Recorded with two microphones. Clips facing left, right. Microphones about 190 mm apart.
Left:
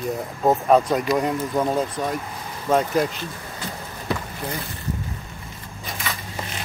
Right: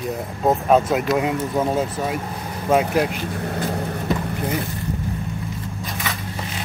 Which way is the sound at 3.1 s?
60° right (ahead or behind).